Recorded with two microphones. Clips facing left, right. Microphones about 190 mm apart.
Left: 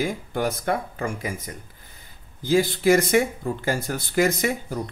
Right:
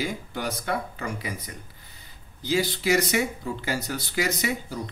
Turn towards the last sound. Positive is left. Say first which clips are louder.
# left 4 dB
turn(degrees=50)  # may be behind; listen again after turning